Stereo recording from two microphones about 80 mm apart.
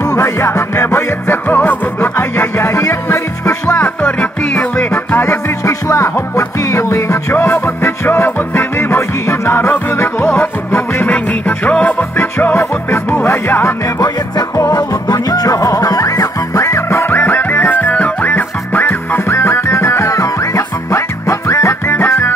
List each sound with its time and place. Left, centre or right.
0.0 s music: left
3.7 s music: centre
5.1 s music: left
5.7 s music: left
14.0 s music: left